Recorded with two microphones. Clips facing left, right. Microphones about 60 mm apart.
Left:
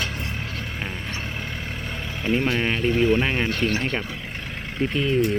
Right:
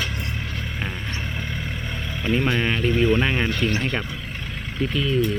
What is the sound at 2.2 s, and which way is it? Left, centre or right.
Speech, centre.